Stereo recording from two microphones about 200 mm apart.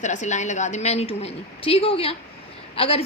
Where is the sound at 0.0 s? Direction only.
35° left (ahead or behind).